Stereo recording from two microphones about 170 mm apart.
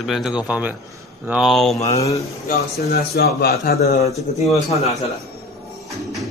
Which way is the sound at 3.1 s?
65° left (ahead or behind).